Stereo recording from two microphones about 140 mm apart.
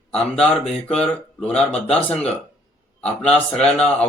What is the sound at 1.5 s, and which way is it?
Speech, 45° left (ahead or behind).